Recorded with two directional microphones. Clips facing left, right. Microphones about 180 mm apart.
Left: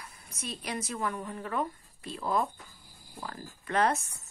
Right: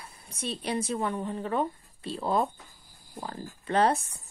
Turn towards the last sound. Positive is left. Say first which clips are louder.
# right 3 dB
turn(degrees=-30)  # may be behind; listen again after turning